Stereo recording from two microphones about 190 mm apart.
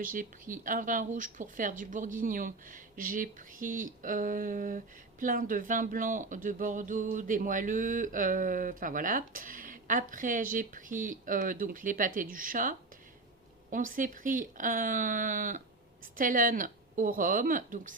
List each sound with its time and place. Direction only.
0.0 s speech: 45° right (ahead or behind)